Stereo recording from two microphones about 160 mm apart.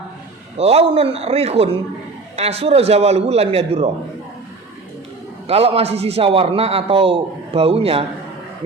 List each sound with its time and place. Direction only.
0.6 s a man's voice: 40° right (ahead or behind)
5.5 s a man's voice: 40° right (ahead or behind)